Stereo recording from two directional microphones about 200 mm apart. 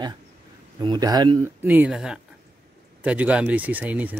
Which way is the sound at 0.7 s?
20° right (ahead or behind).